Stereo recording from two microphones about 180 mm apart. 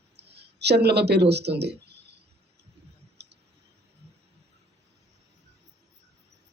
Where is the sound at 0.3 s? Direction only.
65° right (ahead or behind).